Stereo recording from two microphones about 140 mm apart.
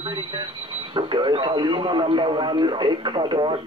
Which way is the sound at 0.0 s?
40° right (ahead or behind).